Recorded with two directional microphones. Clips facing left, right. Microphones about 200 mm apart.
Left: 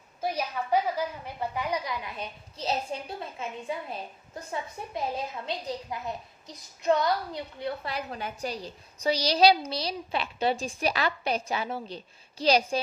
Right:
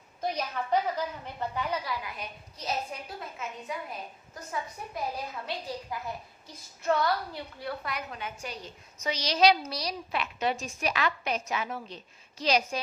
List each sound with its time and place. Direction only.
0.2 s a woman's voice: 10° left (ahead or behind); by 12.8 s 30° left (ahead or behind)